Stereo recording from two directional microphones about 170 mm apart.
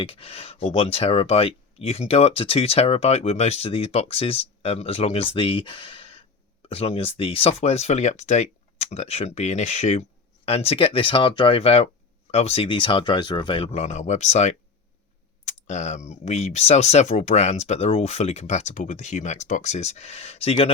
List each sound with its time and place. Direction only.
0.0 s speech: 35° left (ahead or behind)